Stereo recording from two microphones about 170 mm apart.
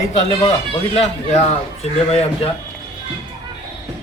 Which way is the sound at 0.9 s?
40° left (ahead or behind).